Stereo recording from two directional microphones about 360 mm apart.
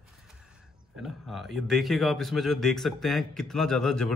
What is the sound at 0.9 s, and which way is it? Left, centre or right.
A man's voice, centre.